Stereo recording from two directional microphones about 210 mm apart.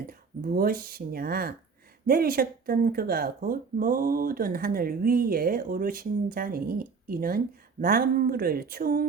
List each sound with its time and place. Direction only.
0.1 s speech: 45° right (ahead or behind)